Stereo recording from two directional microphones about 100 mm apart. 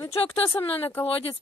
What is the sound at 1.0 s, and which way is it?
Speech, 75° left (ahead or behind).